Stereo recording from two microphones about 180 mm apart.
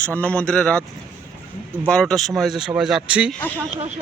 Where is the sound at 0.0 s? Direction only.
10° left (ahead or behind).